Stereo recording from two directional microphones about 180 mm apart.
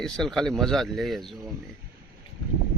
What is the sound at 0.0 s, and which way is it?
Speech, 5° left (ahead or behind).